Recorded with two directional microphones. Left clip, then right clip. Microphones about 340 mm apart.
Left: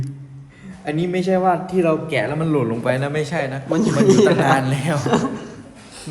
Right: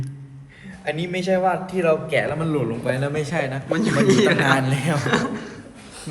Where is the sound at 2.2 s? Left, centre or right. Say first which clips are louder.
Left 2 dB; left.